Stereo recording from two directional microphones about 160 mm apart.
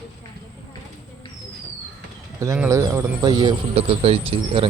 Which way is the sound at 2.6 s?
20° right (ahead or behind).